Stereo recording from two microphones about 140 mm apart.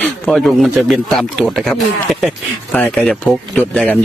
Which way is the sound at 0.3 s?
Centre (ahead or behind).